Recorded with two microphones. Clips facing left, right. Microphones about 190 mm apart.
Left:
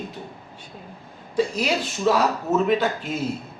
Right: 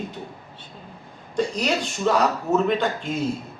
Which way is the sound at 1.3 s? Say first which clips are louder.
Left 1 dB; 5° left (ahead or behind).